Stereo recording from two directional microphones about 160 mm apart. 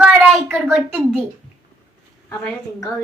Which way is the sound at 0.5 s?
Centre (ahead or behind).